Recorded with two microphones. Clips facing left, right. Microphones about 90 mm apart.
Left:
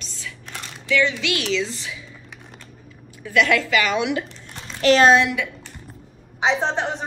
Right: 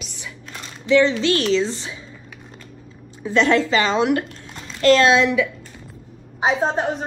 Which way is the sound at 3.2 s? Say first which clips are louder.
Right 2 dB; 30° right (ahead or behind).